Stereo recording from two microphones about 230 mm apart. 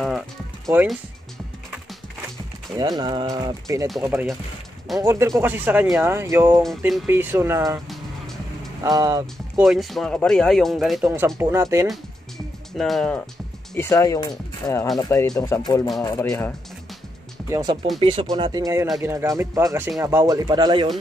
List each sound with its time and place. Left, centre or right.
0.7 s speech: centre
2.8 s speech: centre
8.8 s speech: centre
9.7 s speech: centre
12.7 s speech: centre
17.5 s speech: centre